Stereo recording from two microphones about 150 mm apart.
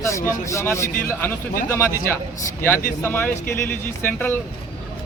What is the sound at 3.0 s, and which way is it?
A man's voice, 15° left (ahead or behind).